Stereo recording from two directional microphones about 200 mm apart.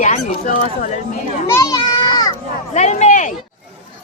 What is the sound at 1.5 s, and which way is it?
Children playing, 15° left (ahead or behind).